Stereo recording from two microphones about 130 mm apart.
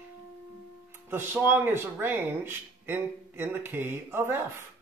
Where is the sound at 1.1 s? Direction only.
15° right (ahead or behind).